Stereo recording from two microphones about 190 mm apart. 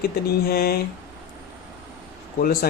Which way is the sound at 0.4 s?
55° left (ahead or behind).